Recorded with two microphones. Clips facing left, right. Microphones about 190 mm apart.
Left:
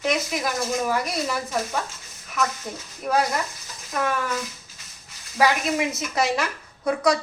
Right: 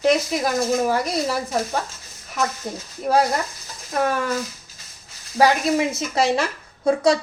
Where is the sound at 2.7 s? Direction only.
30° right (ahead or behind).